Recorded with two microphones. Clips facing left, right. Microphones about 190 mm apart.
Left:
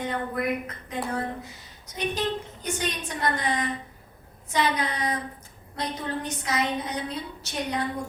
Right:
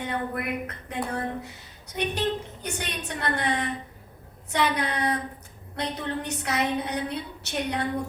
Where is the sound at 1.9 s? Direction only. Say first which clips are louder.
Right 1 dB; 65° right (ahead or behind).